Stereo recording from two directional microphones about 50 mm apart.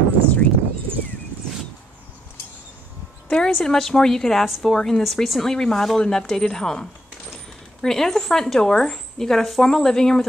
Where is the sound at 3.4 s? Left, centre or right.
Centre.